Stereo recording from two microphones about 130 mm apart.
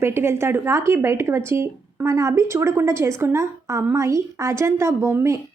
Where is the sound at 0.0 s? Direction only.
20° right (ahead or behind).